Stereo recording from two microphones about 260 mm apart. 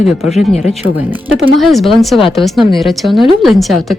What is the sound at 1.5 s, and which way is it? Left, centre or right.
Speech, centre.